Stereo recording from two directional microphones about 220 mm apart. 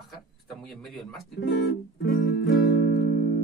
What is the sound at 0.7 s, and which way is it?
Speech, centre (ahead or behind).